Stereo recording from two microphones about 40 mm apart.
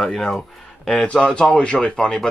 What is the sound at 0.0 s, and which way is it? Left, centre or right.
Speech, centre.